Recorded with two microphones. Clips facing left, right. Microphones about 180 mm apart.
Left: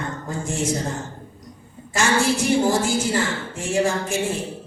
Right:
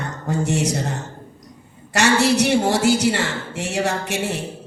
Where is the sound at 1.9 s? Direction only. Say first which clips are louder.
Right 4 dB; 70° right (ahead or behind).